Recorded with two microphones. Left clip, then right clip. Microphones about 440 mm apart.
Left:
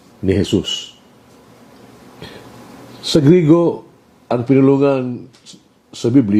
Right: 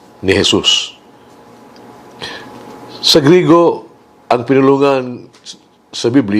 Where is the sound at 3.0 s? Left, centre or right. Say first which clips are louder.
Right 4 dB; right.